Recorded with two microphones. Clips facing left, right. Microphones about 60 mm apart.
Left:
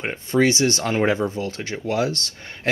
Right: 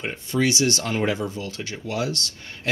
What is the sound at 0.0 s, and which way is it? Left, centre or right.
Speech, left.